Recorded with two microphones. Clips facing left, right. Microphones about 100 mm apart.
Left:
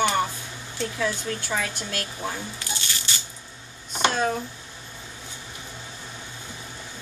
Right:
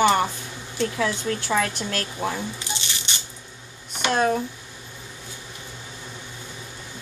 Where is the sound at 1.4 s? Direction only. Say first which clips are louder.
Right 5 dB; 80° right.